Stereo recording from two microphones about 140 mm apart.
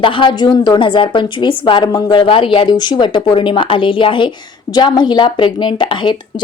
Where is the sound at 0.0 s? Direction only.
35° left (ahead or behind).